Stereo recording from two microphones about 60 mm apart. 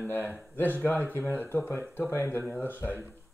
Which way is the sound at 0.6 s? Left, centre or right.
Left.